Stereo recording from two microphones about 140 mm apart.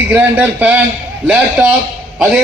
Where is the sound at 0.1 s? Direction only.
10° right (ahead or behind).